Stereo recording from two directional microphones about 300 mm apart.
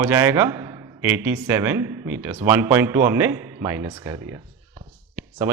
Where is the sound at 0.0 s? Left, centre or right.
Centre.